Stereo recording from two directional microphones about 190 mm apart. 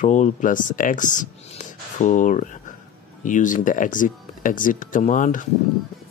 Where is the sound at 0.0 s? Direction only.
40° left (ahead or behind).